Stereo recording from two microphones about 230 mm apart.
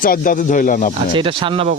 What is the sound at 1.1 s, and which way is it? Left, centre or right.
Speech, right.